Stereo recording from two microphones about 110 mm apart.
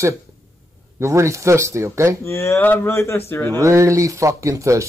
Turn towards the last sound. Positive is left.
turn(degrees=-30)  # may be behind; listen again after turning